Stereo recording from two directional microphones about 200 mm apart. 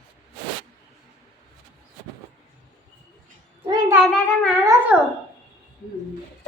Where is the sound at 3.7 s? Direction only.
20° right (ahead or behind).